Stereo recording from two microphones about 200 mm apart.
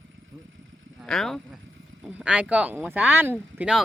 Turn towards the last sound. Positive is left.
turn(degrees=-5)  # may be behind; listen again after turning